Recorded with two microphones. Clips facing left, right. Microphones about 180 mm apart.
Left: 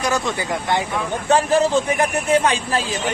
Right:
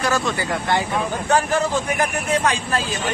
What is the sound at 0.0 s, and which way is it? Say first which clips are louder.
A man's voice: even; 15° left (ahead or behind).